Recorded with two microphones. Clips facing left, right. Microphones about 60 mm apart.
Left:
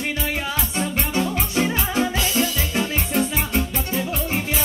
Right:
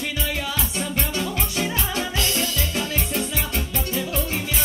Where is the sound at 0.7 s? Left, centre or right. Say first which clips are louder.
Left 5 dB; left.